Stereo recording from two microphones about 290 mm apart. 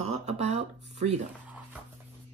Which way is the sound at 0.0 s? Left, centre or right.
Right.